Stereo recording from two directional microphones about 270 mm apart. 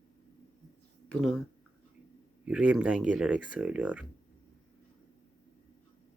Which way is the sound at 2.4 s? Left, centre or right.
Centre.